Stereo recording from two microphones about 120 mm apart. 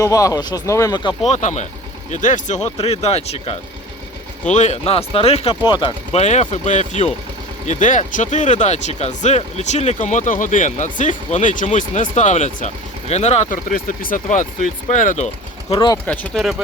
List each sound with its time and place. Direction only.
0.0 s speech: 30° left (ahead or behind)
1.3 s speech: 75° left (ahead or behind)
2.0 s speech: 90° left
2.7 s speech: 60° left (ahead or behind)
4.5 s speech: 70° left (ahead or behind); by 5.5 s 55° left (ahead or behind)
5.6 s speech: 45° left (ahead or behind)
6.1 s speech: 70° left (ahead or behind)
7.7 s speech: 90° left
15.7 s speech: 40° left (ahead or behind)
16.0 s speech: 15° left (ahead or behind)
16.3 s speech: centre (ahead or behind)